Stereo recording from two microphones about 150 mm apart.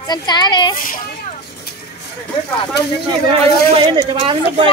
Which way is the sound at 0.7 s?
70° left (ahead or behind).